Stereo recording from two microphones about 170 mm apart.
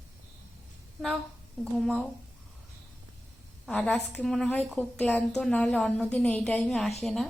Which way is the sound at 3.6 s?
5° left (ahead or behind).